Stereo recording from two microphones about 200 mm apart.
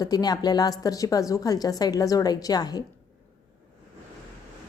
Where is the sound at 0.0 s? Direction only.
20° left (ahead or behind).